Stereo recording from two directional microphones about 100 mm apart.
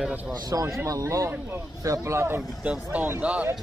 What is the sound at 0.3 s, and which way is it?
Speech, 35° right (ahead or behind).